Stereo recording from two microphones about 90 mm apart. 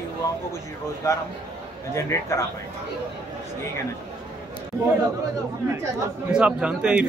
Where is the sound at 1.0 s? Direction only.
35° left (ahead or behind).